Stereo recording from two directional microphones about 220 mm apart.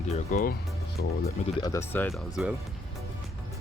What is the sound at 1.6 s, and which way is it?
Speech, 15° left (ahead or behind).